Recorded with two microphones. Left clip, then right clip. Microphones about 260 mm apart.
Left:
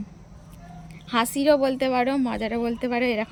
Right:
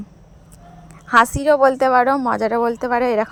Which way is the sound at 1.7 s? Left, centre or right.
Right.